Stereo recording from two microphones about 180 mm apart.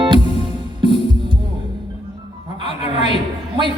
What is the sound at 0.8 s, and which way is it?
Music, 25° right (ahead or behind).